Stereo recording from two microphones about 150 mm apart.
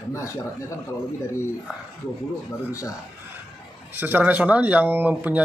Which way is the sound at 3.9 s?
10° right (ahead or behind).